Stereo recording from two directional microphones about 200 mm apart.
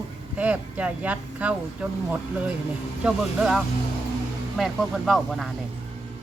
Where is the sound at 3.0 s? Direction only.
5° right (ahead or behind).